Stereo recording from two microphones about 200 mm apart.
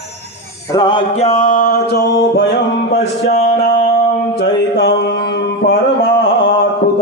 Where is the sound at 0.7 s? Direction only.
20° left (ahead or behind).